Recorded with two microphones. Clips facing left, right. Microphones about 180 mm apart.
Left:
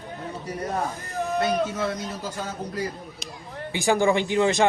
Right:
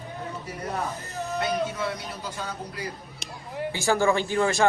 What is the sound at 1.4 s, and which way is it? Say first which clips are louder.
Speech: left 3 dB; 45° left (ahead or behind).